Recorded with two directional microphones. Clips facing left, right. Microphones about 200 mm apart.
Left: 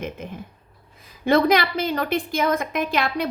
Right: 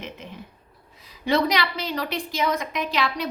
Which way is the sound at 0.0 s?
50° left (ahead or behind).